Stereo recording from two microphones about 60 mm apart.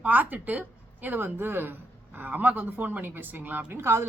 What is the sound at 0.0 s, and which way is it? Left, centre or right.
A woman's voice, right.